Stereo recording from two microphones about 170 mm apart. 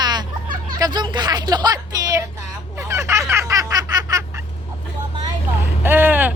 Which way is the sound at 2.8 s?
15° right (ahead or behind).